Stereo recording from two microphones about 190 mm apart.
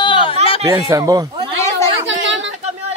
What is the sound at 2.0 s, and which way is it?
Speech, 75° right (ahead or behind).